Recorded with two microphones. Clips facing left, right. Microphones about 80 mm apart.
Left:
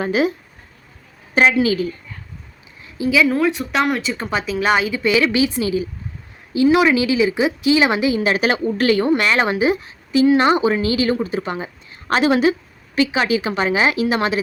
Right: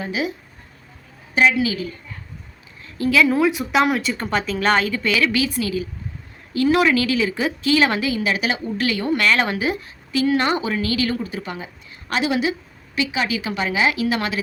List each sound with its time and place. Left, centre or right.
0.0 s speech: left
1.4 s a woman's voice: left
3.0 s speech: centre
8.2 s a woman's voice: left
13.0 s a woman's voice: left